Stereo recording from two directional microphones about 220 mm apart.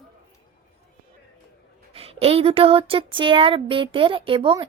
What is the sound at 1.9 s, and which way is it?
Speech, 25° right (ahead or behind).